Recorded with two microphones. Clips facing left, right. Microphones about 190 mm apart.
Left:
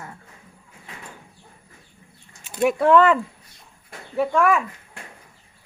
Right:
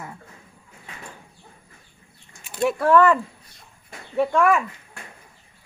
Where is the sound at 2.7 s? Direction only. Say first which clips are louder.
Even; 20° left (ahead or behind).